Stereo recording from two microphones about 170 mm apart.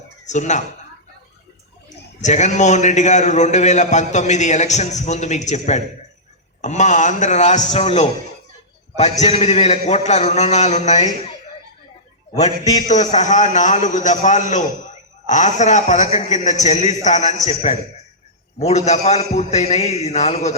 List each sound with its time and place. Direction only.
0.3 s a man's voice: 45° left (ahead or behind)
2.2 s a man's voice: 45° left (ahead or behind)
12.6 s a man's voice: 45° left (ahead or behind)